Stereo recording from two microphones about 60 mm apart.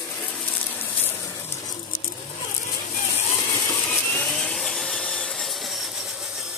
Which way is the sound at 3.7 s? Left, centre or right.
Left.